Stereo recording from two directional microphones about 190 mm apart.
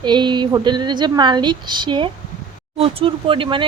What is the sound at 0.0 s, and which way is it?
Speech, 25° right (ahead or behind).